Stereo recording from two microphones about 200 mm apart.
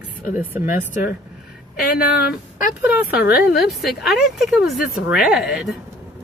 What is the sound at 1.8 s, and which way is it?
Speech, 50° left (ahead or behind).